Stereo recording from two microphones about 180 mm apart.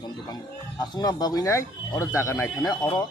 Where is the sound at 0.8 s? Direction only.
20° left (ahead or behind).